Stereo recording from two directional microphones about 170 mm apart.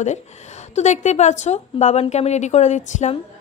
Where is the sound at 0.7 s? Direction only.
40° left (ahead or behind).